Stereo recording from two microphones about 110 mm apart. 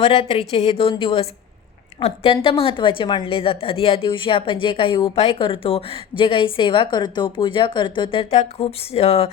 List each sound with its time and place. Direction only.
0.0 s a woman's voice: 60° left (ahead or behind)
8.4 s a woman's voice: 70° left (ahead or behind)